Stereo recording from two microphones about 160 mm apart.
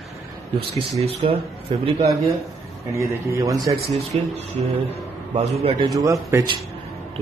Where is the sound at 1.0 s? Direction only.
40° right (ahead or behind).